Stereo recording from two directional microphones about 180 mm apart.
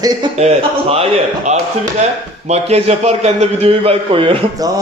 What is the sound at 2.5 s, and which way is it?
A man's voice, 35° right (ahead or behind).